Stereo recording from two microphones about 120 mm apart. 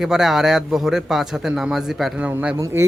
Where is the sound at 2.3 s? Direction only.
15° right (ahead or behind).